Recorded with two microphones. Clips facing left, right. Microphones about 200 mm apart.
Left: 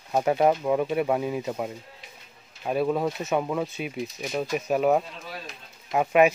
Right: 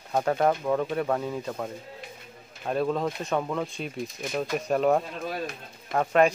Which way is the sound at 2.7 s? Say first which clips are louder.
Left 2 dB; 10° left (ahead or behind).